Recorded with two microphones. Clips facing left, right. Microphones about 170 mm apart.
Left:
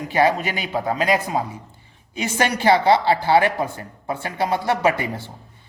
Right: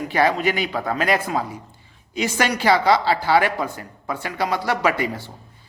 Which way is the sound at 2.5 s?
25° left (ahead or behind).